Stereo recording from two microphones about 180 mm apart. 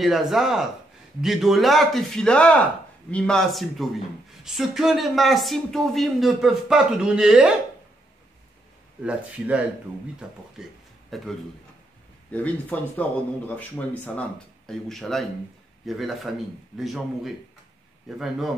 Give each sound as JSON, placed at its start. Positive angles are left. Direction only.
{"t": 0.0, "sound": "speech", "side_deg": 0}
{"t": 9.0, "sound": "a man's voice", "side_deg": -5}